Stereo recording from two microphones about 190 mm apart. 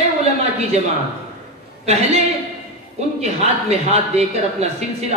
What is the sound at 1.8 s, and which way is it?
Speech, 35° right (ahead or behind).